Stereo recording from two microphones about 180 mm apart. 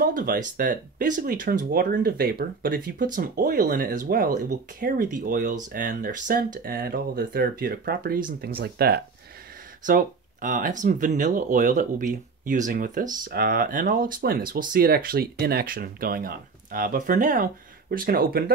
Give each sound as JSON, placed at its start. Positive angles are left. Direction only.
{"t": 0.0, "sound": "speech", "side_deg": -50}
{"t": 9.8, "sound": "speech", "side_deg": -50}